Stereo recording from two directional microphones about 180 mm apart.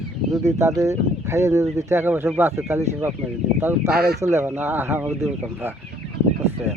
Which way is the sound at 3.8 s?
60° right (ahead or behind).